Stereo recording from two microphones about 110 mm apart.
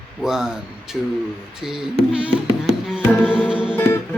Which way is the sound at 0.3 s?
5° right (ahead or behind).